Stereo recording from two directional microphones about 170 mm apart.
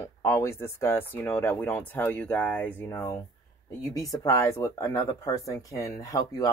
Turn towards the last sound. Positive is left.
turn(degrees=20)  # may be behind; listen again after turning